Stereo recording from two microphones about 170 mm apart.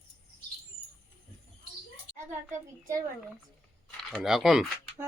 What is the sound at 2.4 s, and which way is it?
Speech, 20° right (ahead or behind).